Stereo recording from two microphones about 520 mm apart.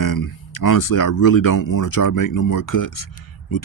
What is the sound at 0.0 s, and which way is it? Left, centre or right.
Speech, left.